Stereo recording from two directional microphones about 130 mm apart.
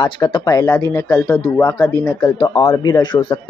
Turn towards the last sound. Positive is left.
turn(degrees=35)  # may be behind; listen again after turning